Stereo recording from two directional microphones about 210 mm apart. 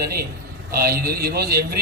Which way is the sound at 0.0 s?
45° right (ahead or behind).